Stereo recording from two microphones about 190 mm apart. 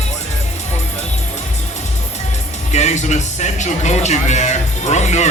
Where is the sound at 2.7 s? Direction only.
35° left (ahead or behind).